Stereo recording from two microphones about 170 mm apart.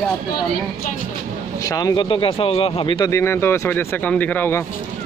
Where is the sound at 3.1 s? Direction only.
15° left (ahead or behind).